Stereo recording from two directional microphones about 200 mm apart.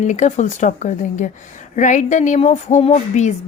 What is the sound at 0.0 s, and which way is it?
A woman's voice, 35° left (ahead or behind).